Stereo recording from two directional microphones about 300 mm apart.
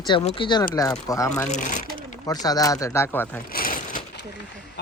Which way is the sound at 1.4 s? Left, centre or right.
Left.